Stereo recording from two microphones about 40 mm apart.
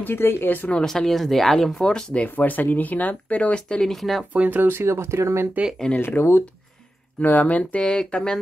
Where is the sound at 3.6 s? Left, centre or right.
Left.